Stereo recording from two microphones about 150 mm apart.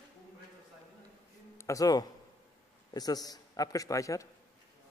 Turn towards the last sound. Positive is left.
turn(degrees=20)  # may be behind; listen again after turning